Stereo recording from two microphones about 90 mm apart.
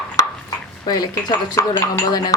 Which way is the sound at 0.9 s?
45° left (ahead or behind).